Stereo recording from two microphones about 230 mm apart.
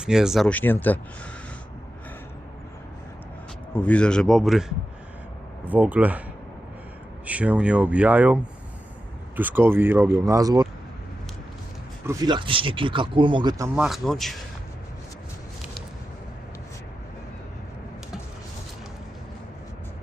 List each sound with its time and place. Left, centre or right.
0.0 s speech: centre
3.8 s speech: centre
5.6 s speech: centre
7.3 s speech: centre
12.0 s speech: centre
13.7 s speech: centre